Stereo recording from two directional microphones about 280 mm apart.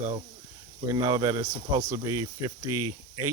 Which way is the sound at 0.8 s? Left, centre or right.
Centre.